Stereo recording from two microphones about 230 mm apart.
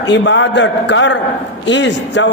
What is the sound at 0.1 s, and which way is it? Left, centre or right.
A man's voice, left.